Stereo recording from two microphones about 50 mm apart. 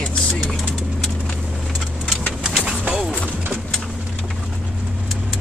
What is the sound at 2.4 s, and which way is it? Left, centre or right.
Vehicle, centre.